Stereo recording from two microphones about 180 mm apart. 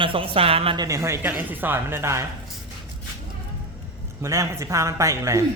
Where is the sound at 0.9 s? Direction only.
15° right (ahead or behind).